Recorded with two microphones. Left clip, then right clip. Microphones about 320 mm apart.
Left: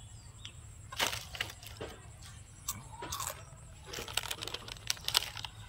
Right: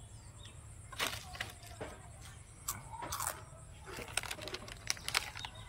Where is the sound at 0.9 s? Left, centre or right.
Centre.